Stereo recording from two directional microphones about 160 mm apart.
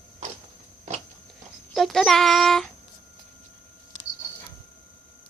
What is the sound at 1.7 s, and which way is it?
Speech, centre (ahead or behind).